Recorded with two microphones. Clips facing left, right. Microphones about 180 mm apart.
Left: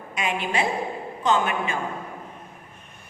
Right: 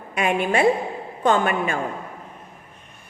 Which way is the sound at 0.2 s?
55° right (ahead or behind).